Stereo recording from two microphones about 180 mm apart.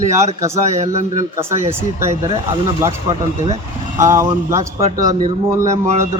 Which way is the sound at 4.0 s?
15° right (ahead or behind).